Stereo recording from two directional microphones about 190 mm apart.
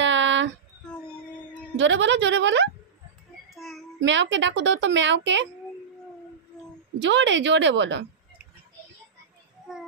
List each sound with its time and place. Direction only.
0.0 s a sound: 75° right (ahead or behind)
1.8 s a child's voice: 70° right (ahead or behind)
3.4 s child singing: centre (ahead or behind)
4.0 s a child's voice: 75° right (ahead or behind)
7.0 s a child's voice: 70° right (ahead or behind)